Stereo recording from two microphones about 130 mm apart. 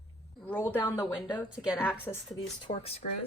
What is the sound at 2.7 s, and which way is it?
Speech, 70° left (ahead or behind).